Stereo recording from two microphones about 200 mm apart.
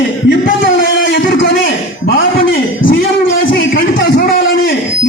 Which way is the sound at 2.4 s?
70° left (ahead or behind).